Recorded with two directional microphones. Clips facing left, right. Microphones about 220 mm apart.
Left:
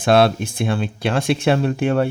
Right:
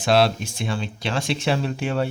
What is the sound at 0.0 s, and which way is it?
Speech, 55° left (ahead or behind).